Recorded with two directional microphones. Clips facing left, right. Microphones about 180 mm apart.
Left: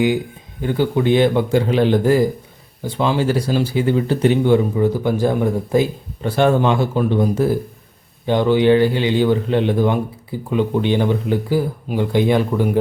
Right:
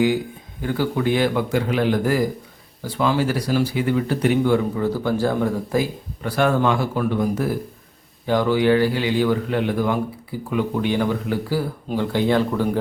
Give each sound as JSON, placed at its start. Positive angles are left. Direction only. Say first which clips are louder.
{"t": 0.6, "sound": "speech", "louder": "left 4 dB", "side_deg": 20}